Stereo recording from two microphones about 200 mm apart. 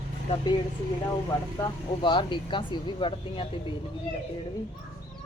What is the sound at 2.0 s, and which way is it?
Speech, 25° left (ahead or behind).